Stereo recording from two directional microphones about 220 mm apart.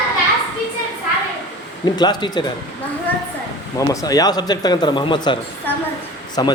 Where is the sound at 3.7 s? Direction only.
15° left (ahead or behind).